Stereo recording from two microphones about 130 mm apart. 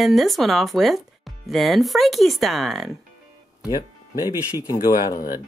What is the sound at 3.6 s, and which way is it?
Music, 30° left (ahead or behind).